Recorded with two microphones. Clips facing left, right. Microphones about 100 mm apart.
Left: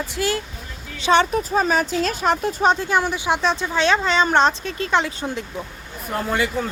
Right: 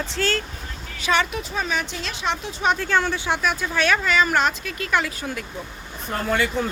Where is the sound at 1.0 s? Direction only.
30° left (ahead or behind).